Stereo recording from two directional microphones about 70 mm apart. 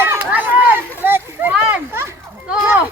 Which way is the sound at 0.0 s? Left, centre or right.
Right.